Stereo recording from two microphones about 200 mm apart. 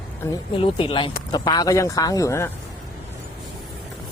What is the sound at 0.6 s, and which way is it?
Speech, 25° left (ahead or behind).